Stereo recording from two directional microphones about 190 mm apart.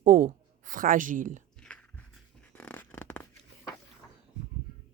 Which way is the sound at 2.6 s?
10° left (ahead or behind).